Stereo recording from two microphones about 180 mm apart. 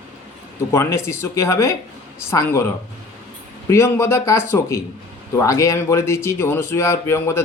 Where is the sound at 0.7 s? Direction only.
15° left (ahead or behind).